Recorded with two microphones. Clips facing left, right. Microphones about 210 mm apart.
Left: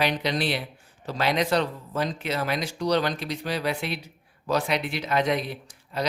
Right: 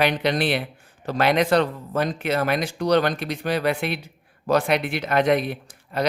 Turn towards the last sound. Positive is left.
turn(degrees=-55)  # may be behind; listen again after turning